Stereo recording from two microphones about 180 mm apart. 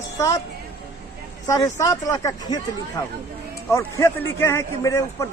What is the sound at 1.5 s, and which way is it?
Speech, 20° left (ahead or behind).